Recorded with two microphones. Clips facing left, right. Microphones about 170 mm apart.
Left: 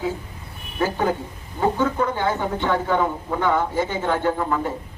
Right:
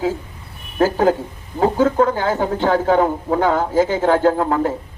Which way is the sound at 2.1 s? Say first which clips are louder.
Right 4 dB; 90° right.